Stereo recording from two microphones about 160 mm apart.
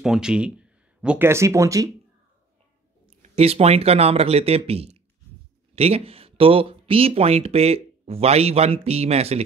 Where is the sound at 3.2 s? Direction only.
40° right (ahead or behind).